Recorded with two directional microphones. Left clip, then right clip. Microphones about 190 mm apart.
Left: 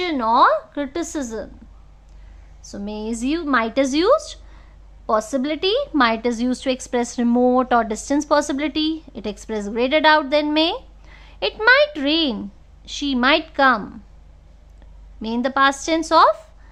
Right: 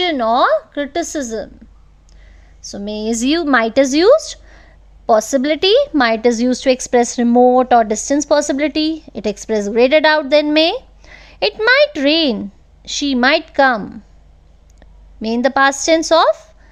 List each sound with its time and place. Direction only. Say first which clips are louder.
0.0 s a woman's voice: right 2 dB; 25° right (ahead or behind)
2.6 s a woman's voice: right 7 dB; 25° right (ahead or behind)
15.2 s a woman's voice: right 5 dB; 30° right (ahead or behind)